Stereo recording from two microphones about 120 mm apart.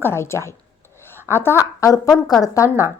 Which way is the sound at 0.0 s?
20° left (ahead or behind).